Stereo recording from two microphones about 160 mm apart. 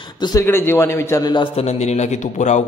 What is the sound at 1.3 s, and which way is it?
A man's voice, 35° left (ahead or behind).